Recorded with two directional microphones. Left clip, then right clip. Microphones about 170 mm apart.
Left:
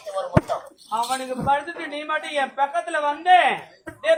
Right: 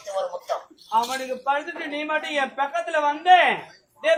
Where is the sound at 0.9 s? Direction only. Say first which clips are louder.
Right 1 dB; 20° left (ahead or behind).